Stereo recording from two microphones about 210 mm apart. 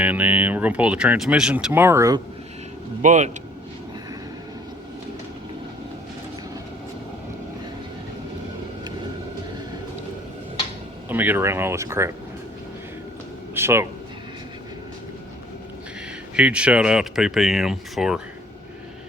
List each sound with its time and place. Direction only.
0.0 s speech: 5° right (ahead or behind)
3.0 s speech: 35° right (ahead or behind)
11.1 s speech: 10° right (ahead or behind)
13.5 s speech: 10° right (ahead or behind)
16.3 s speech: 5° right (ahead or behind)